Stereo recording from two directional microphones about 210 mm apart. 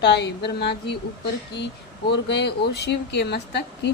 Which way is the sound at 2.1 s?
55° left (ahead or behind).